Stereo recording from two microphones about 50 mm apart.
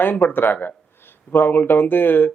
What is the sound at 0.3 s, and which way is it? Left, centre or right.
Speech, left.